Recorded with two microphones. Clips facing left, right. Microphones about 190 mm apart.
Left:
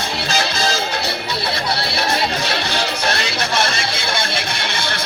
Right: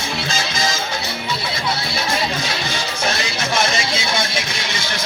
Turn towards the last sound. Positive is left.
turn(degrees=60)  # may be behind; listen again after turning